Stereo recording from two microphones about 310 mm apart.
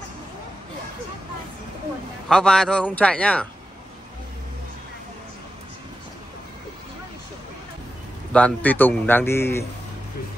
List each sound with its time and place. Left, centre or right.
2.2 s a man's voice: centre
8.3 s a man's voice: centre